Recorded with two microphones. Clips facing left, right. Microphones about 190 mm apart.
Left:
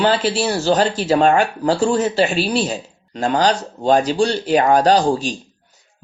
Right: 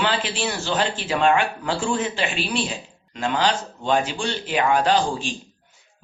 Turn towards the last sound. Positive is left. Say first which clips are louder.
# left 6 dB
turn(degrees=40)  # may be behind; listen again after turning